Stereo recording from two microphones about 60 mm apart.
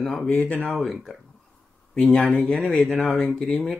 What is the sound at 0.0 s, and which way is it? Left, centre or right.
Speech, centre.